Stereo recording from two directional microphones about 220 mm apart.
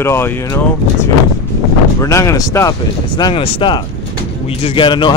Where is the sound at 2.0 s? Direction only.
15° left (ahead or behind).